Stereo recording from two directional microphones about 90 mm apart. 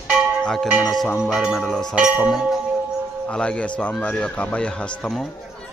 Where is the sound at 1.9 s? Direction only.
10° right (ahead or behind).